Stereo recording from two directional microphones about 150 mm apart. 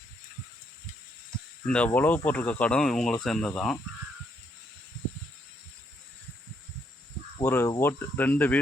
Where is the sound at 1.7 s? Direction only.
10° left (ahead or behind).